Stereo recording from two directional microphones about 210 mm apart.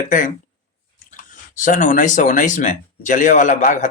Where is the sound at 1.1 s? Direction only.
40° left (ahead or behind).